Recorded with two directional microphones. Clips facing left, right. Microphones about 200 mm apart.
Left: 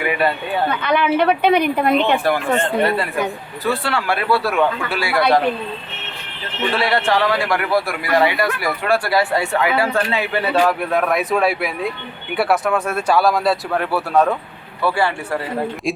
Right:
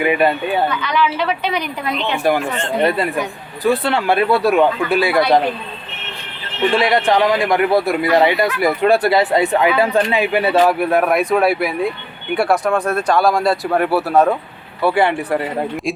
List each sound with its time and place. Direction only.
0.0 s speech: 20° right (ahead or behind)
0.7 s a woman's voice: 55° left (ahead or behind)
3.6 s a man's voice: 20° right (ahead or behind)
6.7 s a man's voice: 15° right (ahead or behind)
14.8 s a man's voice: 20° right (ahead or behind)